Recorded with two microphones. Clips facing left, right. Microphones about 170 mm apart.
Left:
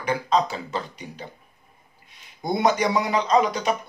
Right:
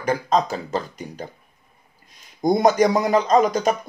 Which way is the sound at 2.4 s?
40° right (ahead or behind).